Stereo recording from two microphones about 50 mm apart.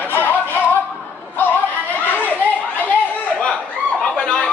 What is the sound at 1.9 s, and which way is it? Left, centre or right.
Chatter, left.